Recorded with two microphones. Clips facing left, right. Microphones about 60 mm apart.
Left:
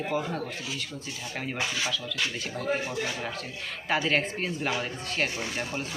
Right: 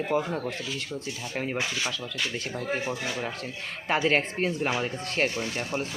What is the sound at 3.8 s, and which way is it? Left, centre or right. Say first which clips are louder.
Speech: right 2 dB; right.